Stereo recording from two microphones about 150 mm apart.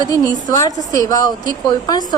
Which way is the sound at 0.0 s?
25° left (ahead or behind).